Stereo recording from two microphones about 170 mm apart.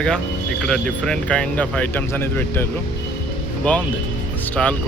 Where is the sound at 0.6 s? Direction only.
5° left (ahead or behind).